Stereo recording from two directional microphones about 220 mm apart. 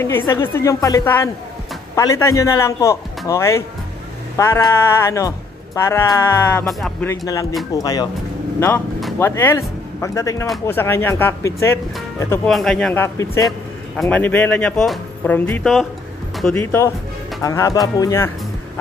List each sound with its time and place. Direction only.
0.3 s speech: 10° left (ahead or behind)
6.6 s speech: centre (ahead or behind)
7.1 s speech: 15° left (ahead or behind)